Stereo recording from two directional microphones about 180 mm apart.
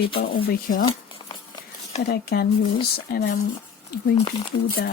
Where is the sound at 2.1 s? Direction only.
60° left (ahead or behind).